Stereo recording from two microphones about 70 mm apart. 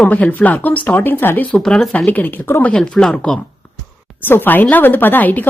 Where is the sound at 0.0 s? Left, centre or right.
Left.